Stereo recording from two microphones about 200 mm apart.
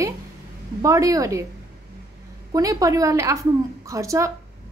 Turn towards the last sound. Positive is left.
turn(degrees=-15)  # may be behind; listen again after turning